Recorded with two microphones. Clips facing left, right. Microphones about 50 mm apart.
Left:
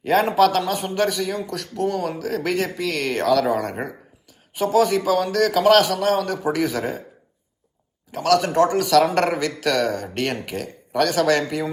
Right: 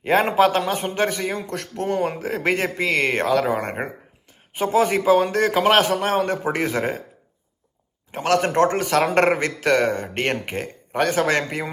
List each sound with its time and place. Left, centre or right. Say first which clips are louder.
0.0 s a man's voice: even; right
8.1 s a man's voice: left 1 dB; right